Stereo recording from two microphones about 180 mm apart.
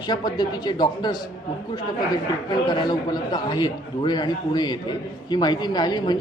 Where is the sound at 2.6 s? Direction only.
25° left (ahead or behind).